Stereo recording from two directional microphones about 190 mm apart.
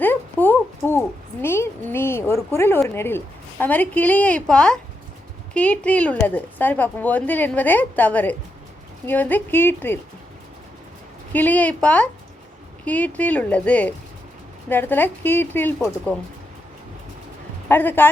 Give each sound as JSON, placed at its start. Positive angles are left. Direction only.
{"t": 0.0, "sound": "a sound", "side_deg": 10}
{"t": 2.9, "sound": "a woman's voice", "side_deg": 10}
{"t": 11.3, "sound": "a woman's voice", "side_deg": 10}
{"t": 17.7, "sound": "a woman's voice", "side_deg": 10}